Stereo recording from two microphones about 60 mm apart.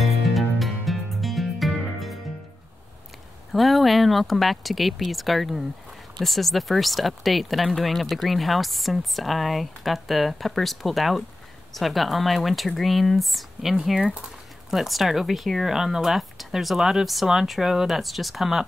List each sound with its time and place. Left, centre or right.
0.0 s music: centre
3.5 s speech: centre